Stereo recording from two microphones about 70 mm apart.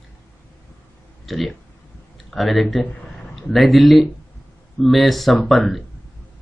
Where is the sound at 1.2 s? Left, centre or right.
Centre.